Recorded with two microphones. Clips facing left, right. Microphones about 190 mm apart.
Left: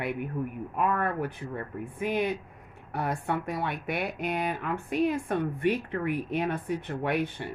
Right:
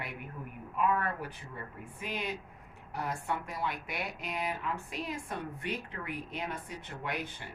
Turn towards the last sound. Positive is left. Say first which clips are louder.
# left 10 dB
turn(degrees=60)  # may be behind; listen again after turning